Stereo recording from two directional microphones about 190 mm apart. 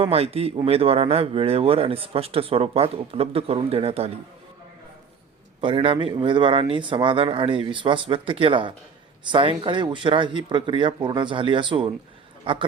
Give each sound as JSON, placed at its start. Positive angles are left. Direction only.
{"t": 0.0, "sound": "a man's voice", "side_deg": -30}
{"t": 5.5, "sound": "speech", "side_deg": -25}